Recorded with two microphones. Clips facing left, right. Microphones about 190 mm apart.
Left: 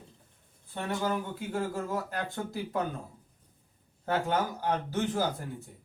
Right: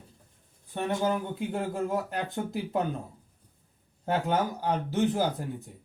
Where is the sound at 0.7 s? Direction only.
20° right (ahead or behind).